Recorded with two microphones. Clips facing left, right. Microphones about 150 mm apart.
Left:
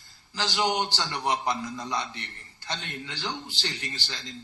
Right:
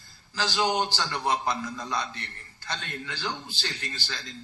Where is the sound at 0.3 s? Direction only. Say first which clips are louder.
Right 1 dB; 15° left (ahead or behind).